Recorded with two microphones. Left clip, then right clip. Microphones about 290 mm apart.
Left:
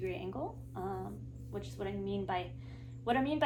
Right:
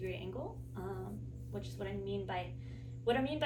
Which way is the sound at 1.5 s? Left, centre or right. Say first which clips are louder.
Left 3 dB; centre.